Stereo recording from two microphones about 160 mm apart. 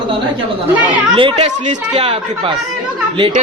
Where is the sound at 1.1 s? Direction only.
35° right (ahead or behind).